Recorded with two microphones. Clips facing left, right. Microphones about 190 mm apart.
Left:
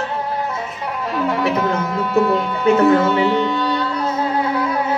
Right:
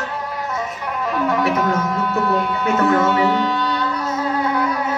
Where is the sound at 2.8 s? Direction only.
25° left (ahead or behind).